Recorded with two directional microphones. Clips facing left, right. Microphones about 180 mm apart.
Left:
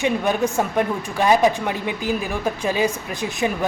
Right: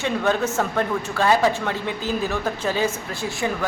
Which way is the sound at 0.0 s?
15° left (ahead or behind).